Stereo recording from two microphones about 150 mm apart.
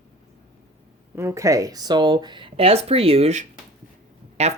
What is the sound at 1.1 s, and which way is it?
Speech, 20° right (ahead or behind).